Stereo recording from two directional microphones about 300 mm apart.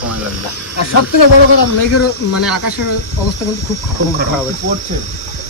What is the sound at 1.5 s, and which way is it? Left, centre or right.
Speech, left.